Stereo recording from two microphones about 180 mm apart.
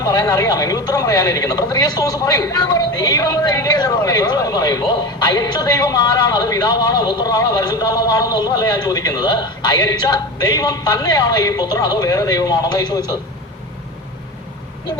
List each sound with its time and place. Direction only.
0.0 s speech: 20° left (ahead or behind)